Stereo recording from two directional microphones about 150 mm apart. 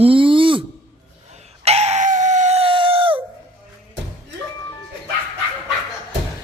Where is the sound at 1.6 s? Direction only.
45° right (ahead or behind).